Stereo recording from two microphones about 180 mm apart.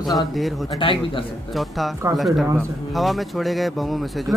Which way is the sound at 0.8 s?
30° left (ahead or behind).